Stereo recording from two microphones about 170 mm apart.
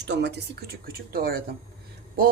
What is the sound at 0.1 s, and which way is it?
Speech, 85° right.